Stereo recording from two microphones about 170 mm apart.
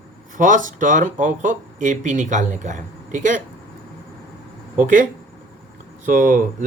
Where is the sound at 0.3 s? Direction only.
50° right (ahead or behind).